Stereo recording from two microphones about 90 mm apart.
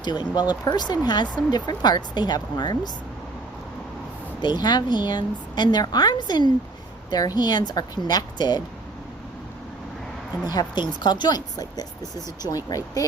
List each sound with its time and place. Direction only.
0.0 s speech: 55° left (ahead or behind)
4.4 s speech: 50° left (ahead or behind)
10.4 s speech: 50° left (ahead or behind)